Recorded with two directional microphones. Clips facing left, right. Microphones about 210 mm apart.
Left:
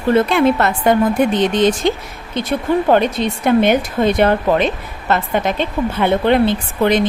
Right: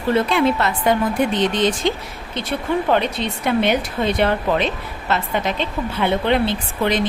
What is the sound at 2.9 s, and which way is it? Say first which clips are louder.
A woman's voice: left 5 dB; 45° left (ahead or behind).